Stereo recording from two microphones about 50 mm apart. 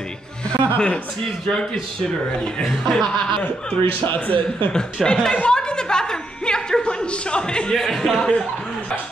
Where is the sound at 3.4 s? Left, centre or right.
Left.